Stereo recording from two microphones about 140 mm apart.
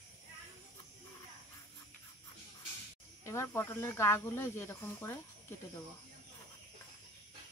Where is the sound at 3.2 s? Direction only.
20° left (ahead or behind).